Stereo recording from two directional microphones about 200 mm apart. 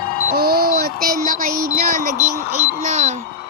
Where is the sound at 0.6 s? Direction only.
50° right (ahead or behind).